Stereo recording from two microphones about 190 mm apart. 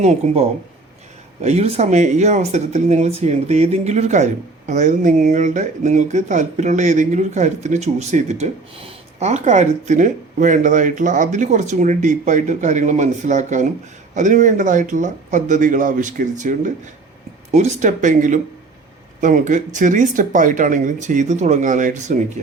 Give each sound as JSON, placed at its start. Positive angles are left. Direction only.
{"t": 0.0, "sound": "speech", "side_deg": -35}